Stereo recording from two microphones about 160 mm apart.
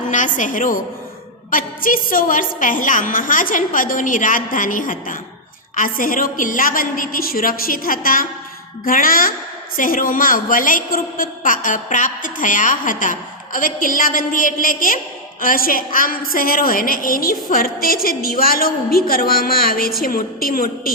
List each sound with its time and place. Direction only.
0.1 s a woman's voice: 50° left (ahead or behind)